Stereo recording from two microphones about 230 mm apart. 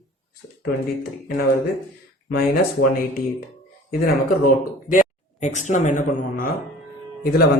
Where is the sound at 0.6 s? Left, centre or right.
Left.